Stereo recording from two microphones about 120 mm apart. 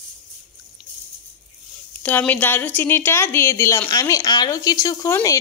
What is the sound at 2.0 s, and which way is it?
A woman's voice, 15° left (ahead or behind).